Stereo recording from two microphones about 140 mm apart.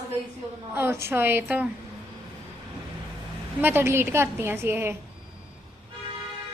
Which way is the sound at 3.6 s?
15° right (ahead or behind).